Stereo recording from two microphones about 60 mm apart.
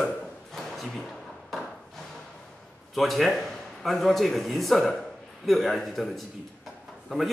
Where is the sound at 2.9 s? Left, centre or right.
Centre.